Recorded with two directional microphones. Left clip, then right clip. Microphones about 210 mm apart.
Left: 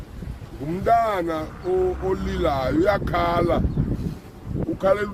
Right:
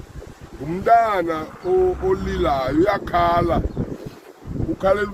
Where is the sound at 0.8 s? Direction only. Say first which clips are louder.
Right 4 dB; 55° left (ahead or behind).